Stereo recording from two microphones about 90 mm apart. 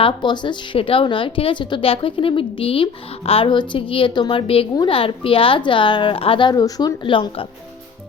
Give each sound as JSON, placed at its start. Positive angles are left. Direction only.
{"t": 0.0, "sound": "a woman's voice", "side_deg": 60}
{"t": 6.5, "sound": "a woman's voice", "side_deg": 45}
{"t": 7.0, "sound": "a woman's voice", "side_deg": 75}